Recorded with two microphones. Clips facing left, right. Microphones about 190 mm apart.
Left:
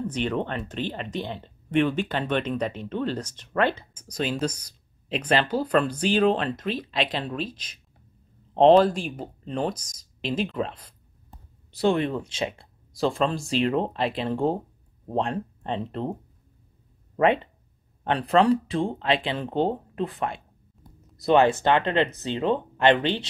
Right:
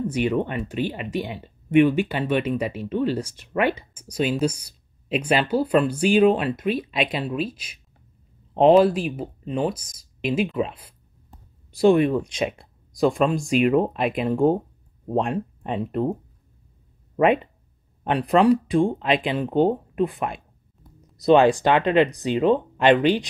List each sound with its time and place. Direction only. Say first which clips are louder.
0.0 s speech: right 4 dB; 10° right (ahead or behind)
18.0 s speech: right 3 dB; 15° right (ahead or behind)